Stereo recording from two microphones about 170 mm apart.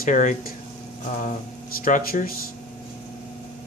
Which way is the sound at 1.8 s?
55° left (ahead or behind).